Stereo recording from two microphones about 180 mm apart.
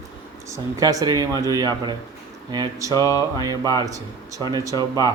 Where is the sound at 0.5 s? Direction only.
20° right (ahead or behind).